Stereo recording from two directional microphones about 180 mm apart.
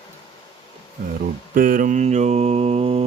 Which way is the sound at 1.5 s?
50° right (ahead or behind).